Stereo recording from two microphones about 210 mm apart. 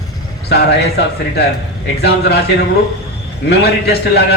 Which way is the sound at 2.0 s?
50° left (ahead or behind).